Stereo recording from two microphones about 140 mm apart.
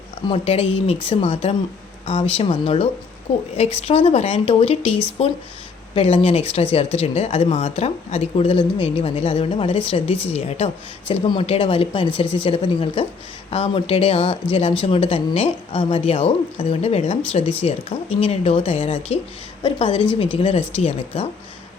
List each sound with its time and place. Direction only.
0.3 s speech: 45° left (ahead or behind)
4.9 s speech: 10° left (ahead or behind)
5.9 s speech: 40° left (ahead or behind)